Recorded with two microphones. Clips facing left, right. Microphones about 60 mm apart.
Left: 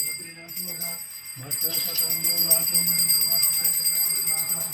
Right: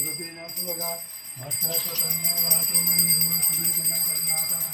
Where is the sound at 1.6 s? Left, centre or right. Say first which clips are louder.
Right 2 dB; right.